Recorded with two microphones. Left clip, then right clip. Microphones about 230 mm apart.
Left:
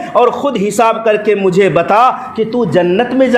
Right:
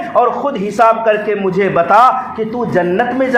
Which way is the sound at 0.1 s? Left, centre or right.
Left.